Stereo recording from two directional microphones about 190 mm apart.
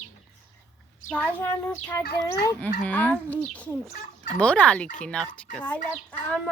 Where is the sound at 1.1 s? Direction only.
10° left (ahead or behind).